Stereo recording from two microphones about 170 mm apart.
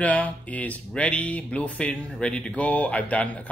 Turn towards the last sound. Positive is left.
turn(degrees=10)  # may be behind; listen again after turning